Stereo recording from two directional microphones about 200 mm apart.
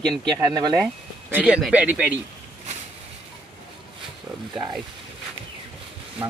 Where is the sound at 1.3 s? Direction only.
5° right (ahead or behind).